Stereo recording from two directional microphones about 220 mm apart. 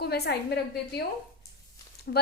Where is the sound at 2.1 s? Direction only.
45° left (ahead or behind).